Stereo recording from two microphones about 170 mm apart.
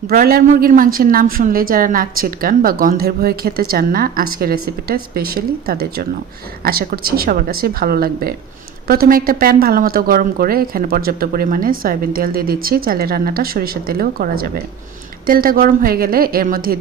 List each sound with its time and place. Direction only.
0.1 s a woman's voice: 60° right (ahead or behind)